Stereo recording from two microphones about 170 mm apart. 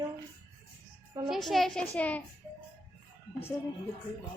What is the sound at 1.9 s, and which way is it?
Speech, 10° left (ahead or behind).